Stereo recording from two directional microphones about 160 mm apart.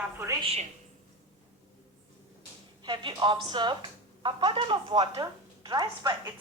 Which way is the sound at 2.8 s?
30° right (ahead or behind).